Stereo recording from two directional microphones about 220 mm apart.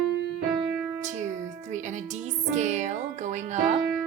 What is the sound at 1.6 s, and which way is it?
Music, 35° right (ahead or behind).